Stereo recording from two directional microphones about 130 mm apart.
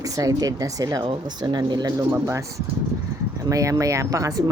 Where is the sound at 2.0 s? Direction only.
20° right (ahead or behind).